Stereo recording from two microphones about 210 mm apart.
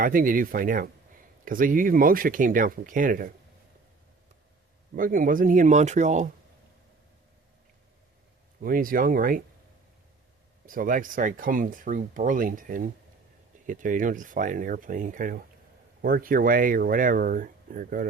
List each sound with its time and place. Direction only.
0.0 s speech: 40° right (ahead or behind)
4.9 s speech: 40° right (ahead or behind)
8.6 s speech: 40° right (ahead or behind)
10.7 s speech: 40° right (ahead or behind)